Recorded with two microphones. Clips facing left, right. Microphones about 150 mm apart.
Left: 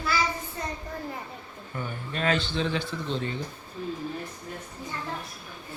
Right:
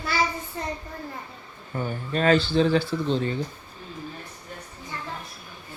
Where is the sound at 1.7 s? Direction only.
35° right (ahead or behind).